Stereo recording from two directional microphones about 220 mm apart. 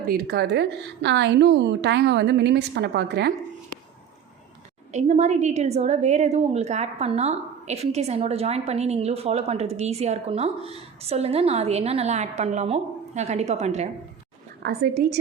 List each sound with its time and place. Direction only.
0.0 s a woman's voice: 45° right (ahead or behind)
4.9 s a woman's voice: 30° right (ahead or behind)
14.6 s a woman's voice: 45° right (ahead or behind)